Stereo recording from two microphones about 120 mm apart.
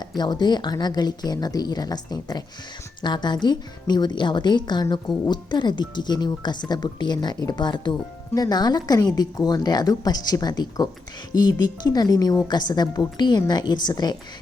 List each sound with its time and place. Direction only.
0.2 s speech: 35° left (ahead or behind)